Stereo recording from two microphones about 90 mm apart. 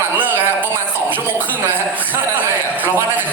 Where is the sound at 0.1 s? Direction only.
20° right (ahead or behind).